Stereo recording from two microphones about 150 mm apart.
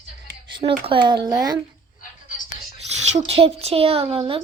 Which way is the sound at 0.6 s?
35° right (ahead or behind).